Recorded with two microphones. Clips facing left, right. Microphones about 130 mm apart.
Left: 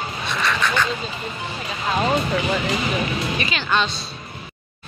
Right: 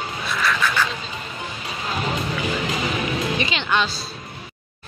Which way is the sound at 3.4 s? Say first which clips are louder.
Left 2 dB; 20° right (ahead or behind).